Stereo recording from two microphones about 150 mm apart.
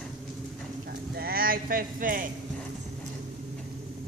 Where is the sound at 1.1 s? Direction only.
85° right; by 2.2 s 65° right (ahead or behind).